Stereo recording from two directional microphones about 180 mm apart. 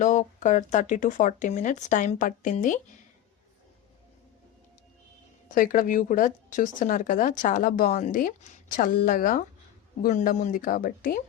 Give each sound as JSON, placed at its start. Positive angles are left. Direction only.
{"t": 0.0, "sound": "speech", "side_deg": 45}
{"t": 5.5, "sound": "speech", "side_deg": 50}